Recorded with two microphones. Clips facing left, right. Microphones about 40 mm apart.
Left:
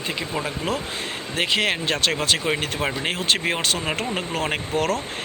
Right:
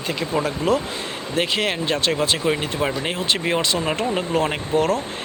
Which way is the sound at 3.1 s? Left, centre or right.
Left.